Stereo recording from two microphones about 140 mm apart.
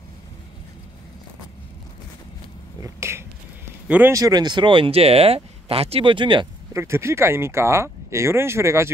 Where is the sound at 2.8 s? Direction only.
20° right (ahead or behind).